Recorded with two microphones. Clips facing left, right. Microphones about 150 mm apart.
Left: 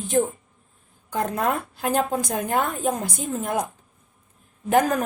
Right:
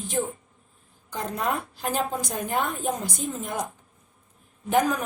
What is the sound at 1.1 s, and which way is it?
A woman's voice, 60° left (ahead or behind).